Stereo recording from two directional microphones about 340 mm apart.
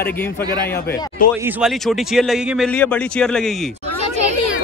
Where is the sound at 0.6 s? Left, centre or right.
Left.